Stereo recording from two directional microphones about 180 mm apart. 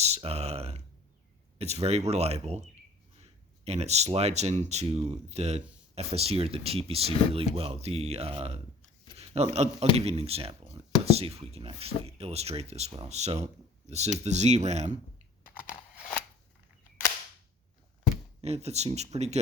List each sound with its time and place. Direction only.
0.0 s speech: 35° right (ahead or behind)
9.1 s a sound: 35° right (ahead or behind)
9.9 s speech: 35° right (ahead or behind)
18.4 s speech: 35° right (ahead or behind)